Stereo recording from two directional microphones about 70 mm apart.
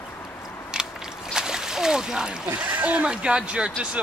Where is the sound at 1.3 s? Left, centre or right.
Centre.